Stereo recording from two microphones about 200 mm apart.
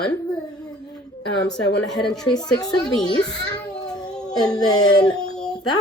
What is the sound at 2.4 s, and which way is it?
Speech, 20° left (ahead or behind).